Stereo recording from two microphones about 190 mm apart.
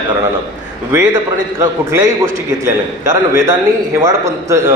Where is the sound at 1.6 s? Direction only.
15° right (ahead or behind).